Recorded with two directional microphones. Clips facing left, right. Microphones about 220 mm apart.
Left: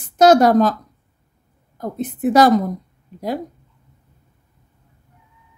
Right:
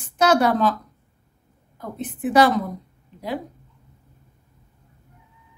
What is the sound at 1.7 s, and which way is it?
Speech, 40° left (ahead or behind).